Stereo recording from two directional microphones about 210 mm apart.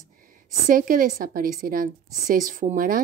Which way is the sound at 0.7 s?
40° right (ahead or behind).